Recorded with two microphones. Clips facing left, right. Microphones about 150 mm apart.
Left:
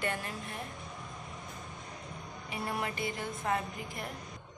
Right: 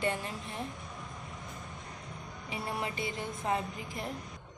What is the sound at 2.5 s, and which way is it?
Speech, 25° right (ahead or behind).